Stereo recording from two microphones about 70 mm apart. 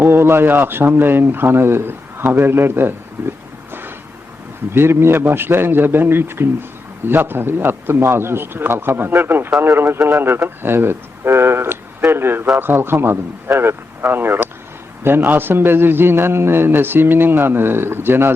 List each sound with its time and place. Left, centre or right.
0.0 s a man's voice: right